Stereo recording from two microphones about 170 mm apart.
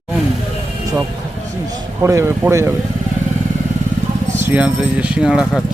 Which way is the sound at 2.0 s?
15° right (ahead or behind).